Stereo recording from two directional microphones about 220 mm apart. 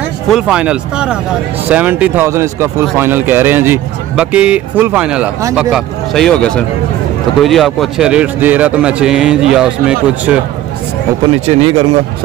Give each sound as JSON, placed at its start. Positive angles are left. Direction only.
{"t": 0.3, "sound": "a man's voice", "side_deg": -5}
{"t": 11.4, "sound": "speech", "side_deg": -25}